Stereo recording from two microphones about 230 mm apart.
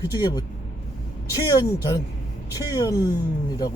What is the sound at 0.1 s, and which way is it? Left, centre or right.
Speech, centre.